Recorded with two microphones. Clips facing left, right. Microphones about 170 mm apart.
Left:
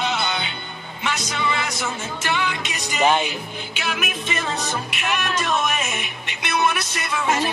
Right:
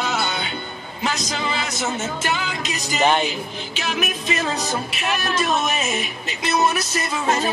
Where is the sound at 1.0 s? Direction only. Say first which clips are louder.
Even; 35° right (ahead or behind).